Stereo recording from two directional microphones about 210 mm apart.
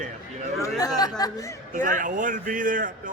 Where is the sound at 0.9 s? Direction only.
20° left (ahead or behind).